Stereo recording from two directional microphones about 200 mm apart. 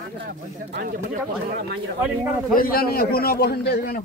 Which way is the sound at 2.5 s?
45° left (ahead or behind).